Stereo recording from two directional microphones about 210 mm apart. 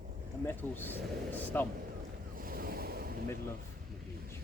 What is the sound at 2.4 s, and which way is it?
Waves, 45° right (ahead or behind).